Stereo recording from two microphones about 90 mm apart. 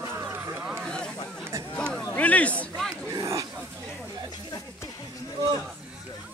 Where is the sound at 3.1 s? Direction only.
35° right (ahead or behind).